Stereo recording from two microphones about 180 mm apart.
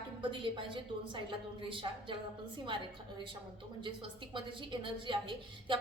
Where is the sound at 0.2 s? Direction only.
30° right (ahead or behind).